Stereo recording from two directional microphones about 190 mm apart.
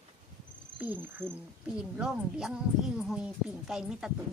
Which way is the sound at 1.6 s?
5° right (ahead or behind).